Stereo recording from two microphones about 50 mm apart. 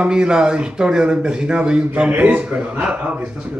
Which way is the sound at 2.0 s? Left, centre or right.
Right.